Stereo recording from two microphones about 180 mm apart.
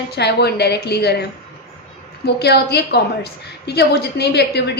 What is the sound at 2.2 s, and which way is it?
A woman's voice, 65° left (ahead or behind).